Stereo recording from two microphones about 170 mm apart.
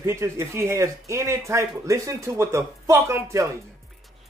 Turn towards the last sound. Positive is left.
turn(degrees=-15)  # may be behind; listen again after turning